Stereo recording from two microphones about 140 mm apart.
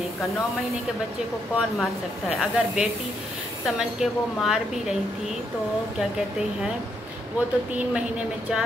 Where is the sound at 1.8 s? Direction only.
Centre (ahead or behind).